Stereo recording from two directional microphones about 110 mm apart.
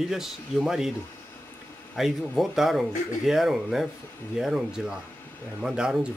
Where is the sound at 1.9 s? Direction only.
Centre (ahead or behind).